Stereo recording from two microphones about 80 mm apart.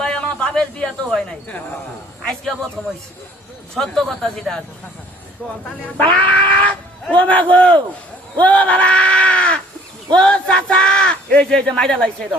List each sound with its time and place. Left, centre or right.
0.0 s a sound: centre
2.2 s a man's voice: centre
3.8 s a man's voice: centre
5.8 s cat: centre
7.5 s speech: centre